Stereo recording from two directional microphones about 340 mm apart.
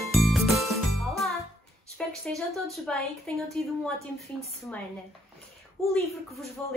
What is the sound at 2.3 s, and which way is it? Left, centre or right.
A woman's voice, centre.